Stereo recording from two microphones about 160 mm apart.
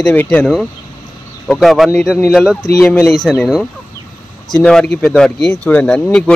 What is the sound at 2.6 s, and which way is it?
Speech, 15° left (ahead or behind).